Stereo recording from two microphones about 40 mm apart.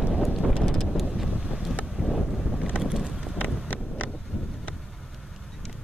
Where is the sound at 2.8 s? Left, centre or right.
Centre.